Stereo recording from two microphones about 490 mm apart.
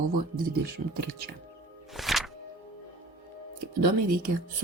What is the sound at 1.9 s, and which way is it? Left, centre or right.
Music, centre.